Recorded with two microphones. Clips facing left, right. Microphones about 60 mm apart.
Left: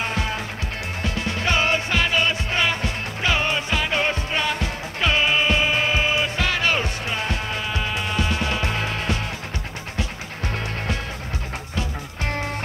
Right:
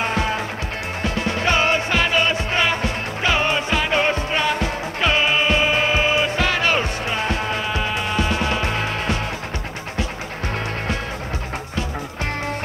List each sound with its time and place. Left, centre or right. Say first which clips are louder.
0.0 s music: right 4 dB; right